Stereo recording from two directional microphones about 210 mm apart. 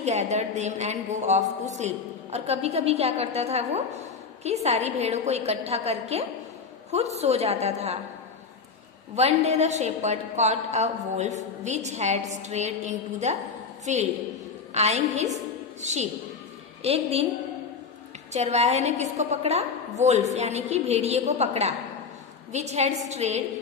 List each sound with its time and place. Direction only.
0.0 s a woman's voice: 30° right (ahead or behind)
9.1 s a woman's voice: 30° right (ahead or behind)
15.3 s a sound: 35° right (ahead or behind)
16.8 s a woman's voice: 30° right (ahead or behind)
18.3 s a woman's voice: 30° right (ahead or behind)